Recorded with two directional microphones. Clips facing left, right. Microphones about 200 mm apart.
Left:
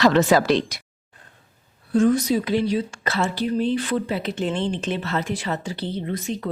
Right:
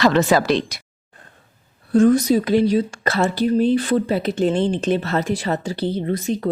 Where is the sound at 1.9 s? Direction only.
45° right (ahead or behind).